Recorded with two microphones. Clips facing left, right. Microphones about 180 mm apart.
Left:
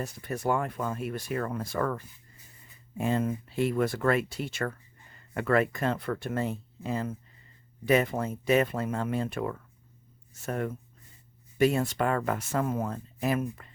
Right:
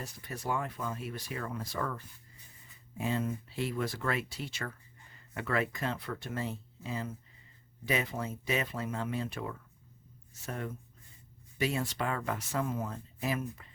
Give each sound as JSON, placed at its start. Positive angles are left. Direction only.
{"t": 0.0, "sound": "speech", "side_deg": 55}
{"t": 3.0, "sound": "speech", "side_deg": 55}